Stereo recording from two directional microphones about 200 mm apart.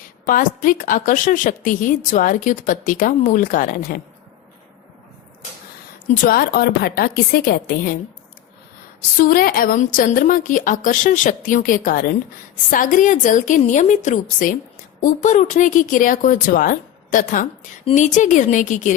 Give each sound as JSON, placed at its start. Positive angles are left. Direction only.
{"t": 0.3, "sound": "a woman's voice", "side_deg": 45}
{"t": 6.2, "sound": "a woman's voice", "side_deg": 50}
{"t": 9.1, "sound": "a woman's voice", "side_deg": 45}